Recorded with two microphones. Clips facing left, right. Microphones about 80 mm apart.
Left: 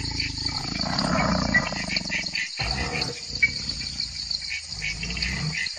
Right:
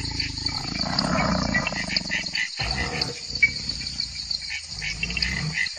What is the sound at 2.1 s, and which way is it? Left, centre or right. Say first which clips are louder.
Wild animals: right 2 dB; right.